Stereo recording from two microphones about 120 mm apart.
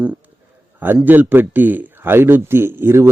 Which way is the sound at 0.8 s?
15° right (ahead or behind).